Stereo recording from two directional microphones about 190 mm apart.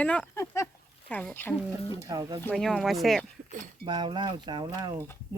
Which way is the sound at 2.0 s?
20° right (ahead or behind).